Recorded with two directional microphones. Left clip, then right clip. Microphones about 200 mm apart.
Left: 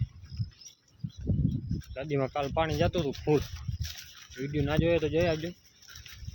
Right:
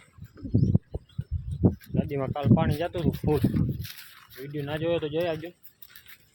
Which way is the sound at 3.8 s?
Centre (ahead or behind).